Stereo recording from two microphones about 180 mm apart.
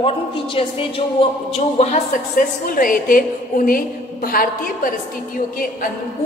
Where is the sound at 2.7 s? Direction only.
50° left (ahead or behind).